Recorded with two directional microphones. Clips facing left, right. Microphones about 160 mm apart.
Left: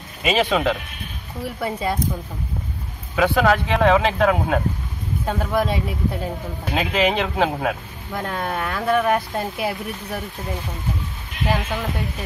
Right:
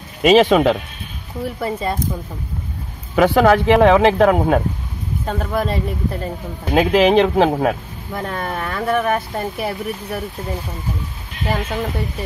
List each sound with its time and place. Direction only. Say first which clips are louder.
0.2 s a man's voice: right 8 dB; 70° right (ahead or behind)
1.4 s speech: right 2 dB; centre (ahead or behind)
3.2 s speech: right 5 dB; 55° right (ahead or behind)
5.2 s speech: even; centre (ahead or behind)
6.7 s speech: right 8 dB; 40° right (ahead or behind)
8.1 s speech: right 1 dB; centre (ahead or behind)